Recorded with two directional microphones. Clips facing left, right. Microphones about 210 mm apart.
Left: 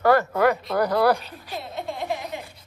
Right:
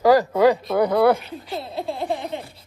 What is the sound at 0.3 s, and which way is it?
Speech, 30° right (ahead or behind).